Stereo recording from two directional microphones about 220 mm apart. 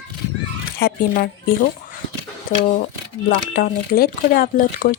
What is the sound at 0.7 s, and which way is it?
Speech, 50° left (ahead or behind).